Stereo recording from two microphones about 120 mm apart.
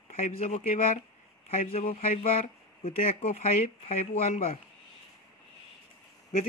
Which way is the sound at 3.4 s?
75° left (ahead or behind).